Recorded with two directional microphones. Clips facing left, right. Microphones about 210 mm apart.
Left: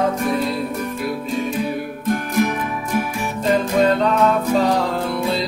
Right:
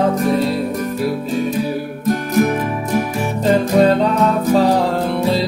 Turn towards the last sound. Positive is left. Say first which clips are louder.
# right 4 dB
turn(degrees=-35)  # may be behind; listen again after turning